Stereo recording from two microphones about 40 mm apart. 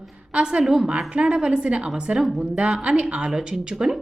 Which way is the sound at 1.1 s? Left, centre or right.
Right.